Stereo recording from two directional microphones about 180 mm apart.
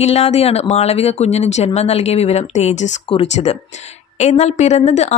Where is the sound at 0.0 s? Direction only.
35° left (ahead or behind).